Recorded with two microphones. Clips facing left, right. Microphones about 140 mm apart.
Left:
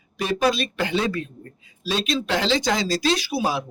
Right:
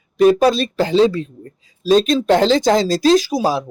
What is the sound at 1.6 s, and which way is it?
Speech, 40° right (ahead or behind).